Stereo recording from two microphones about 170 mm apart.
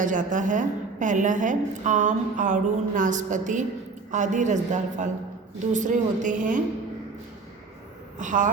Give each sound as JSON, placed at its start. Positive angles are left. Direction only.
{"t": 0.0, "sound": "a woman's voice", "side_deg": -50}
{"t": 8.2, "sound": "a woman's voice", "side_deg": -50}